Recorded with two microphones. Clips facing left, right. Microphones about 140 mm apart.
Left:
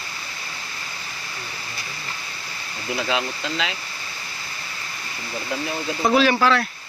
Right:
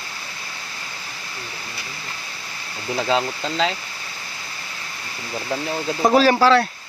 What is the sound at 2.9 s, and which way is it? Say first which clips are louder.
Speech: right 4 dB; 35° right (ahead or behind).